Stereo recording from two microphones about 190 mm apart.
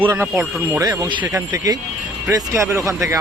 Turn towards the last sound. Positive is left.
turn(degrees=-15)  # may be behind; listen again after turning